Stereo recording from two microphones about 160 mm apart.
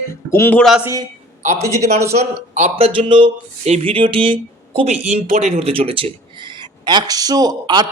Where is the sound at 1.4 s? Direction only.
45° right (ahead or behind).